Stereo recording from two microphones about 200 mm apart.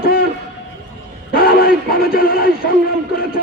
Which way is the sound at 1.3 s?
50° left (ahead or behind).